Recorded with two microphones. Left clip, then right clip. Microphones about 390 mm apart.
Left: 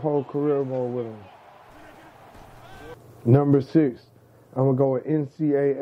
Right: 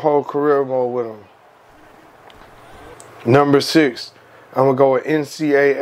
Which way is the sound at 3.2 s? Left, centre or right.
Centre.